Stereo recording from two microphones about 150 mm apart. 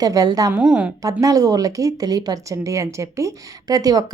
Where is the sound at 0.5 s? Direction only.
5° right (ahead or behind).